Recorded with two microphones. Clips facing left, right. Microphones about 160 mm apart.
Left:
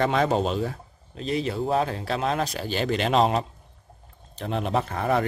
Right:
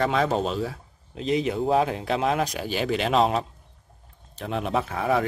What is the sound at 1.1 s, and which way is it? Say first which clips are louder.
A man's voice: right 2 dB; 20° right (ahead or behind).